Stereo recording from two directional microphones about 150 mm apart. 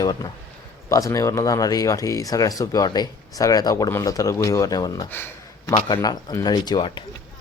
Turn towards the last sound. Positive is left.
turn(degrees=30)  # may be behind; listen again after turning